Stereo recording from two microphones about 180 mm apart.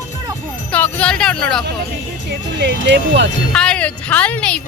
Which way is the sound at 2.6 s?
75° right (ahead or behind).